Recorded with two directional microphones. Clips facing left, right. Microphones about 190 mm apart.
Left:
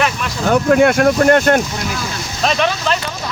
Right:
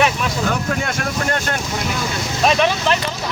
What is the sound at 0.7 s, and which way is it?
Speech, 55° left (ahead or behind).